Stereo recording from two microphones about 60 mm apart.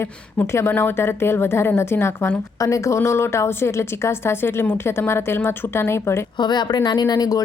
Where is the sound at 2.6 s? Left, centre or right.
Left.